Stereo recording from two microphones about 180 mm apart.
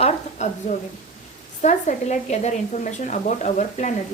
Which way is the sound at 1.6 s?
40° left (ahead or behind).